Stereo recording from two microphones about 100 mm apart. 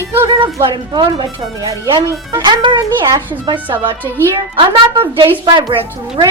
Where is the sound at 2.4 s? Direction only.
50° right (ahead or behind).